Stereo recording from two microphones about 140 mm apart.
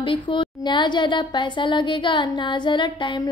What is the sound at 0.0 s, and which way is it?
A woman's voice, 35° left (ahead or behind).